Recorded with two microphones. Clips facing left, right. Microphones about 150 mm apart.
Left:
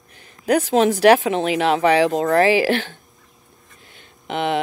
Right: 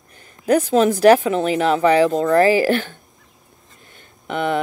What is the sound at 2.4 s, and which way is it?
Speech, 45° right (ahead or behind).